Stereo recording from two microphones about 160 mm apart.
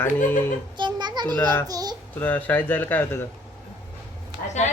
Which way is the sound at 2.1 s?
10° left (ahead or behind).